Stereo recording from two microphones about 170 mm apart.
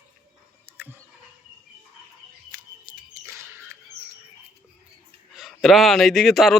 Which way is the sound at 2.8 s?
20° right (ahead or behind).